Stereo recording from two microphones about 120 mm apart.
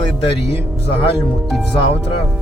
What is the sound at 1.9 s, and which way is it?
Speech, 50° left (ahead or behind).